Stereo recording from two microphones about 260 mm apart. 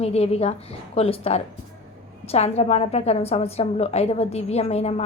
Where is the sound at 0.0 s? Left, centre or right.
Left.